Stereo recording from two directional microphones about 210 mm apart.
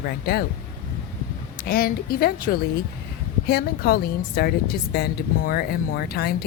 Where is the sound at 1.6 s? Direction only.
45° left (ahead or behind).